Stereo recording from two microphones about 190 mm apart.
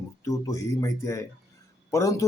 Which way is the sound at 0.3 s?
15° left (ahead or behind).